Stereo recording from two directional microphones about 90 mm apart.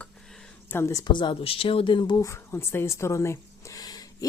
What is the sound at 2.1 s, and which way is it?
Speech, 35° left (ahead or behind).